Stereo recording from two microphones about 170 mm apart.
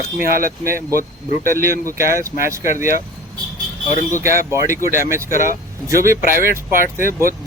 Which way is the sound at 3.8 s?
45° left (ahead or behind).